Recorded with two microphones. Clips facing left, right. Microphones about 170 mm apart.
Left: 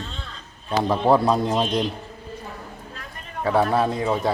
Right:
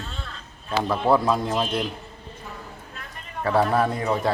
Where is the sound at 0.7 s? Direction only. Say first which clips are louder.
Left 3 dB; 35° left (ahead or behind).